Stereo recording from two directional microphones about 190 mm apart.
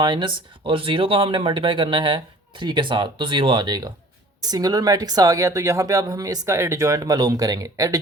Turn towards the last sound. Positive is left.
turn(degrees=-20)  # may be behind; listen again after turning